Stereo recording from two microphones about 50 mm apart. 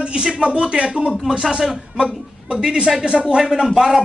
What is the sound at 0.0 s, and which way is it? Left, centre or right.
A man's voice, centre.